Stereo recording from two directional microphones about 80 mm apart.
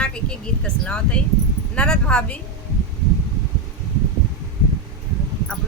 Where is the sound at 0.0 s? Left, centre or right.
Centre.